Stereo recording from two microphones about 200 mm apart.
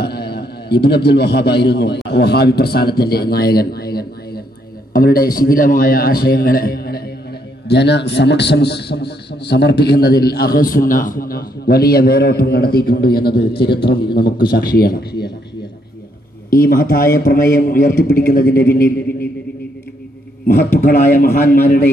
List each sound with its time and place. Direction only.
0.0 s a man's voice: 55° left (ahead or behind)
16.4 s a man's voice: 45° left (ahead or behind)
20.8 s a man's voice: 45° left (ahead or behind)